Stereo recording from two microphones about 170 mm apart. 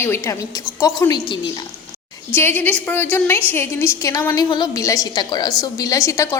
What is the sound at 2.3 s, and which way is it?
A woman's voice, 10° left (ahead or behind).